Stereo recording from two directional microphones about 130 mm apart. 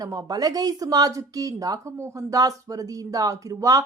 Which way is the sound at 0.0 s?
30° right (ahead or behind).